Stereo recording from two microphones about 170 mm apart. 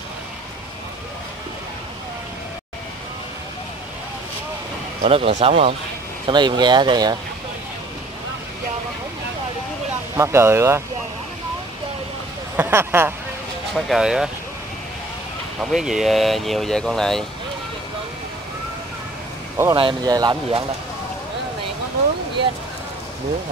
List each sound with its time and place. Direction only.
5.0 s speech: 40° right (ahead or behind)
10.1 s speech: 15° right (ahead or behind)
12.5 s speech: 15° right (ahead or behind)
13.7 s speech: centre (ahead or behind)
15.6 s speech: centre (ahead or behind)
19.7 s speech: 30° right (ahead or behind)